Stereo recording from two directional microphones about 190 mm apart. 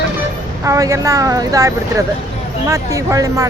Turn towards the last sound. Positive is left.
turn(degrees=-15)  # may be behind; listen again after turning